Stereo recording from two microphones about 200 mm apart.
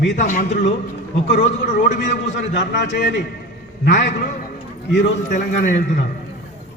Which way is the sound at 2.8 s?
60° left (ahead or behind).